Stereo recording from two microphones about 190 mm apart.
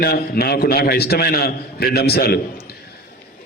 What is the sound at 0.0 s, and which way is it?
A man's voice, 55° left (ahead or behind).